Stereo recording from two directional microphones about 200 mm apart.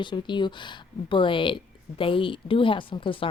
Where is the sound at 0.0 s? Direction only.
25° left (ahead or behind).